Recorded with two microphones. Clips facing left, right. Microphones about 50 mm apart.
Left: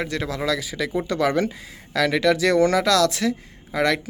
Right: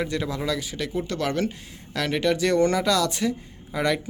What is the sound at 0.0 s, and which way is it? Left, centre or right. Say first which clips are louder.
Speech: left 1 dB; left.